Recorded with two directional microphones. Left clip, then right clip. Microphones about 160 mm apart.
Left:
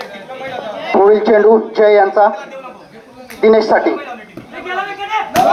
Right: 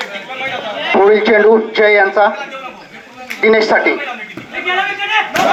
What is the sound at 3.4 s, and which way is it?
Speech, 40° left (ahead or behind).